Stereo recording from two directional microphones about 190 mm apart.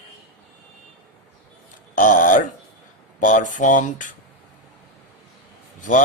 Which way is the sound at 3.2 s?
40° left (ahead or behind).